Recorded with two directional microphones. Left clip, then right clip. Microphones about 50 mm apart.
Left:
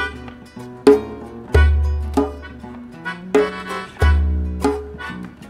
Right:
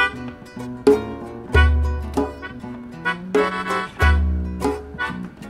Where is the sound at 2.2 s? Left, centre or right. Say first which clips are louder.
Left 4 dB; left.